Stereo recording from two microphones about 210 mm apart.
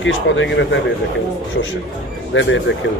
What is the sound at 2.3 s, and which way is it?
Speech, 60° left (ahead or behind).